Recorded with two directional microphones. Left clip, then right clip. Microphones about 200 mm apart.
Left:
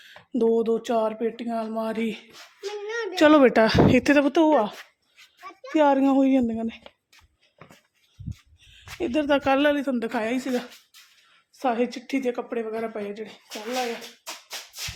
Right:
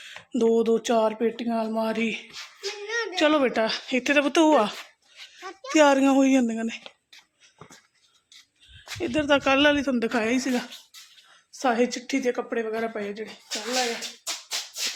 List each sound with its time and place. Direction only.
0.0 s a sound: 15° left (ahead or behind)
0.6 s speech: 10° right (ahead or behind)
2.3 s child singing: 15° left (ahead or behind)
2.8 s speech: 35° left (ahead or behind)
4.2 s speech: 15° left (ahead or behind)
9.0 s a woman's voice: 25° left (ahead or behind); by 13.8 s centre (ahead or behind)